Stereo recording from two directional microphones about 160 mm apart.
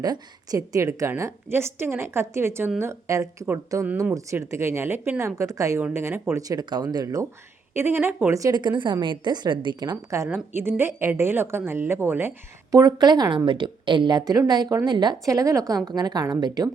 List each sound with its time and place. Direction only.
0.0 s a woman's voice: 25° right (ahead or behind)
12.7 s a woman's voice: 25° right (ahead or behind)